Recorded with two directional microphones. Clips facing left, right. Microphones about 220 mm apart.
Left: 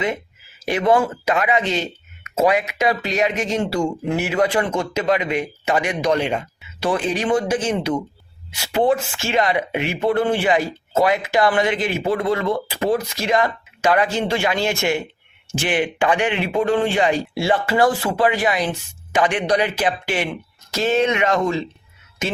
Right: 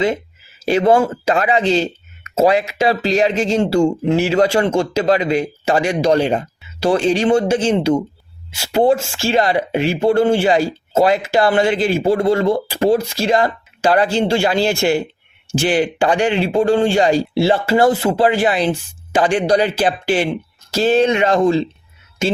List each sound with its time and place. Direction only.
0.6 s speech: 30° right (ahead or behind)